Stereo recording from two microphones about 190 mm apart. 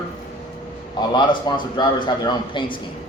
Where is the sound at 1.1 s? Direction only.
25° left (ahead or behind).